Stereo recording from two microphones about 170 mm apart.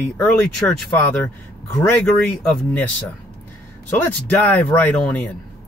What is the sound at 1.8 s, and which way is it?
Speech, 5° left (ahead or behind).